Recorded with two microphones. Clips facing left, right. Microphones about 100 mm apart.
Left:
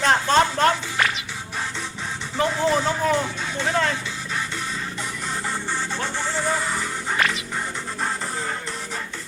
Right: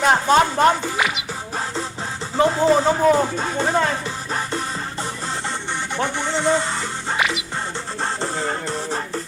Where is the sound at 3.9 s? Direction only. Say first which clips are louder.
Right 4 dB; 40° right (ahead or behind).